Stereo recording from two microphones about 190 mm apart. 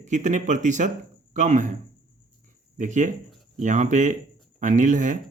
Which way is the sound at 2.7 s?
40° right (ahead or behind).